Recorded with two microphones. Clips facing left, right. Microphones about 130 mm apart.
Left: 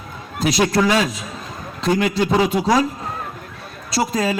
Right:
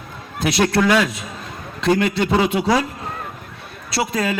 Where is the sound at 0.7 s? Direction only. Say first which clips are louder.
Right 1 dB; 60° right (ahead or behind).